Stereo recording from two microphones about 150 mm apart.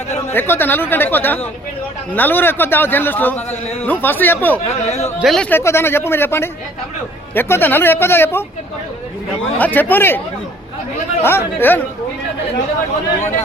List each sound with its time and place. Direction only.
0.3 s a man's voice: 15° left (ahead or behind)
4.9 s a man's voice: 45° left (ahead or behind)
5.2 s speech: centre (ahead or behind)
5.5 s a man's voice: 15° left (ahead or behind)
9.6 s a man's voice: 10° left (ahead or behind)
11.2 s a man's voice: 15° left (ahead or behind)